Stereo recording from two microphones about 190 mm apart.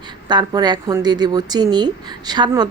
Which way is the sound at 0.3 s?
25° right (ahead or behind).